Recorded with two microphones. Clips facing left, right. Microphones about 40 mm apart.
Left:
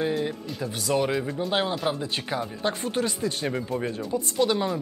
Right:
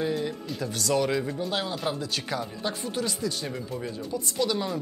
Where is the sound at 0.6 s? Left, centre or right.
Centre.